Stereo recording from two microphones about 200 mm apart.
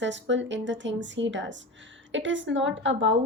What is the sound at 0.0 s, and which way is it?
A woman's voice, 65° right (ahead or behind).